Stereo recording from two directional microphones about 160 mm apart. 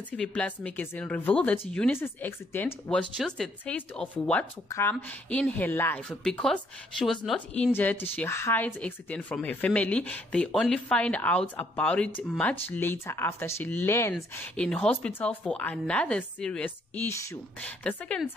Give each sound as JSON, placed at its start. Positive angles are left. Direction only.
{"t": 0.1, "sound": "a woman's voice", "side_deg": 5}